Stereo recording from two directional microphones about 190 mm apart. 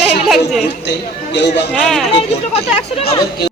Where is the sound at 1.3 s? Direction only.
65° left (ahead or behind).